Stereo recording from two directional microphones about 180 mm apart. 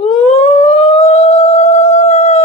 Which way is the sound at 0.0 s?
35° left (ahead or behind).